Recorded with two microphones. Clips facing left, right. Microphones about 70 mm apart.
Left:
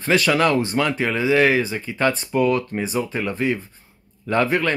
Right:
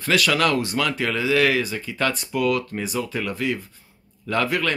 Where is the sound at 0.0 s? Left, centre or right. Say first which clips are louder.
Left 2 dB; left.